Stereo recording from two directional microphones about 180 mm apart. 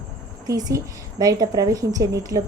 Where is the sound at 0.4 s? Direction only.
20° right (ahead or behind).